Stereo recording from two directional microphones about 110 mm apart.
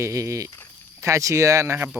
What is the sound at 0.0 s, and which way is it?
Speech, 30° right (ahead or behind).